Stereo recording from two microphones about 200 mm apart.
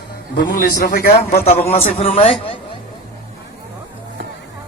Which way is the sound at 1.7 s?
30° left (ahead or behind).